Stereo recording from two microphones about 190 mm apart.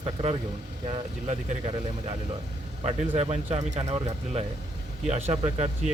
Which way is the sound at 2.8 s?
35° right (ahead or behind).